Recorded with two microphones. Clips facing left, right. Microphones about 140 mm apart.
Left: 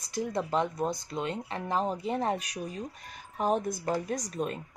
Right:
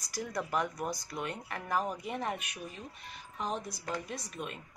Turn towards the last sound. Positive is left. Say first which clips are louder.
# left 8 dB
turn(degrees=40)  # may be behind; listen again after turning